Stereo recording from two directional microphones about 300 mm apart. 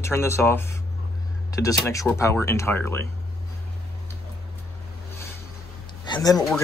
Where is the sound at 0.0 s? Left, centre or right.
Centre.